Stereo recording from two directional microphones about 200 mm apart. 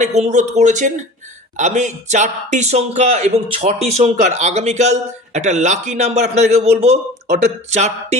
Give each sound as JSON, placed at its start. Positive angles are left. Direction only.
{"t": 0.0, "sound": "speech", "side_deg": -35}